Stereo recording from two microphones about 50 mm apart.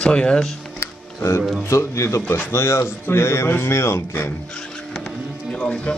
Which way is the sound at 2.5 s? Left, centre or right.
Left.